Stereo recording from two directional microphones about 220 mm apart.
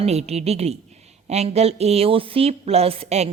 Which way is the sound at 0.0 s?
30° right (ahead or behind).